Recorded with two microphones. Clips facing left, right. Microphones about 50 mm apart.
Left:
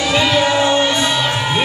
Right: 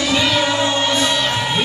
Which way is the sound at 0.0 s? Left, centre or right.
Centre.